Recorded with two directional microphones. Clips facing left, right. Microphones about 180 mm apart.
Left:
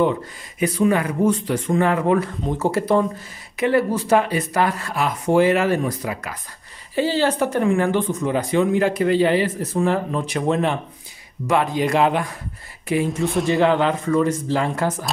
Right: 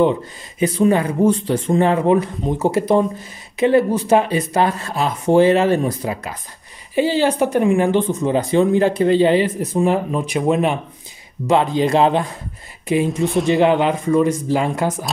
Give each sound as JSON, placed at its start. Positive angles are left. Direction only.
{"t": 0.6, "sound": "speech", "side_deg": -25}
{"t": 7.0, "sound": "speech", "side_deg": -15}
{"t": 13.2, "sound": "speech", "side_deg": 0}
{"t": 13.5, "sound": "speech", "side_deg": -20}